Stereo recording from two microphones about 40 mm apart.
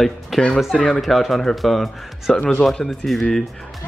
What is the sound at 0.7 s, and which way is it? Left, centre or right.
Speech, left.